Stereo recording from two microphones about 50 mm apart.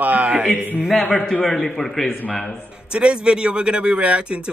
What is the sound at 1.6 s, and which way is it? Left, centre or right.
Speech, centre.